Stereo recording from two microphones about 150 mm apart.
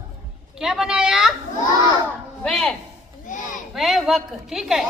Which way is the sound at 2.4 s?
10° left (ahead or behind).